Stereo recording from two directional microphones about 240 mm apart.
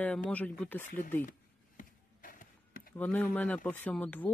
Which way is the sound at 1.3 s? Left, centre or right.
Left.